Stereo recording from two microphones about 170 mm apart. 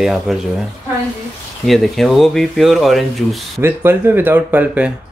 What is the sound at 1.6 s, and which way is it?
Speech, centre (ahead or behind).